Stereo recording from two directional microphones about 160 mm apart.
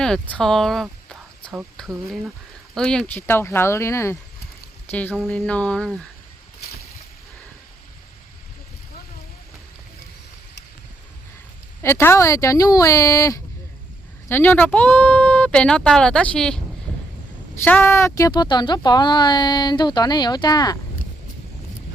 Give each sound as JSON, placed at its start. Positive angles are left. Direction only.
{"t": 0.0, "sound": "speech", "side_deg": 5}
{"t": 2.7, "sound": "speech", "side_deg": 5}
{"t": 11.8, "sound": "a woman's voice", "side_deg": 15}